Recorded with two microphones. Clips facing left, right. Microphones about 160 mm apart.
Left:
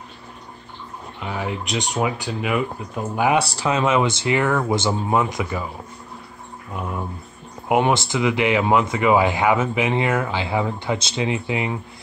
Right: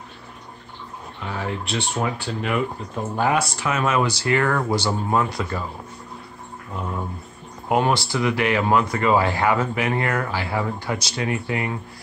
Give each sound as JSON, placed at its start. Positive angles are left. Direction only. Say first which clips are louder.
{"t": 1.2, "sound": "speech", "louder": "left 1 dB", "side_deg": 15}
{"t": 3.3, "sound": "speech", "louder": "left 3 dB", "side_deg": 30}
{"t": 7.6, "sound": "speech", "louder": "left 2 dB", "side_deg": 15}